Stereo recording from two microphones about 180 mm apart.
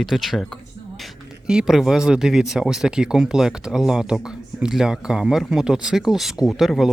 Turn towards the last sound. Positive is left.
turn(degrees=0)  # may be behind; listen again after turning